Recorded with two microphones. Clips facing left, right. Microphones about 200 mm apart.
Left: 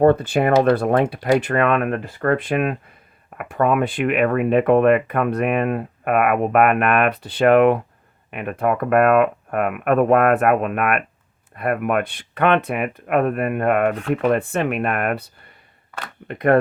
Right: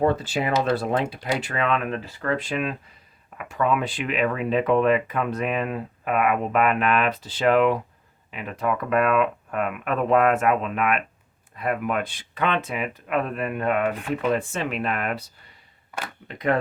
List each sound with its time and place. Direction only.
0.0 s speech: 55° left (ahead or behind)
16.3 s speech: 55° left (ahead or behind)